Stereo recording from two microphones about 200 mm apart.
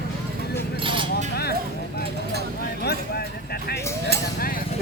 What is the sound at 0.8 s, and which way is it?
Vehicle, 25° right (ahead or behind).